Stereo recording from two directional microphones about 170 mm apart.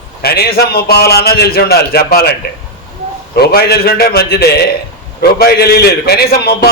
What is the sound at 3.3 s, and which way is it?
A man's voice, 65° left (ahead or behind).